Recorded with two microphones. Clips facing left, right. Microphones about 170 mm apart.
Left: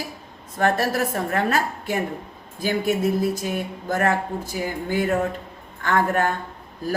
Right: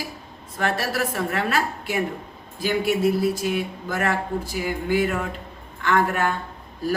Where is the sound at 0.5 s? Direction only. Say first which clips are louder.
Left 4 dB; 45° left (ahead or behind).